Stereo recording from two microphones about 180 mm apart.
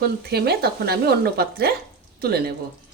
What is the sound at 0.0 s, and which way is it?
Speech, 60° right (ahead or behind).